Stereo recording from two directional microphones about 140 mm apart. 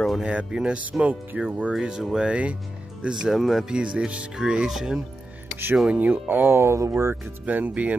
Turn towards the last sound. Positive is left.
turn(degrees=-10)  # may be behind; listen again after turning